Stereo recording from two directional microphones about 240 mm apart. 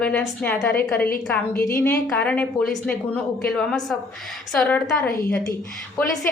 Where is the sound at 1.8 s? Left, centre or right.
Centre.